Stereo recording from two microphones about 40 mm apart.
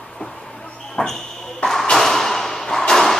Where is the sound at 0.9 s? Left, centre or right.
Centre.